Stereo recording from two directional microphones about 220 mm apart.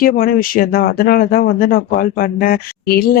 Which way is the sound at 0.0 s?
40° left (ahead or behind).